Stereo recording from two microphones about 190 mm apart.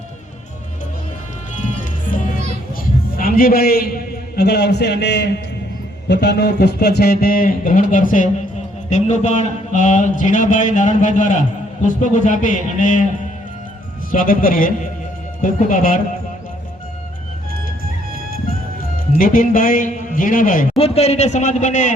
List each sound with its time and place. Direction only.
3.2 s a man's voice: 50° left (ahead or behind)
14.1 s a man's voice: 45° left (ahead or behind)
19.2 s a man's voice: 45° left (ahead or behind)
20.7 s speech: 30° left (ahead or behind)